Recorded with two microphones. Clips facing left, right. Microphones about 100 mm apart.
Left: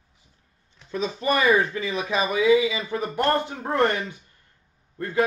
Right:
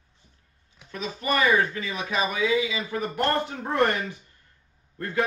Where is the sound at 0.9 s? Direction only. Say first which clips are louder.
Left 6 dB; 30° left (ahead or behind).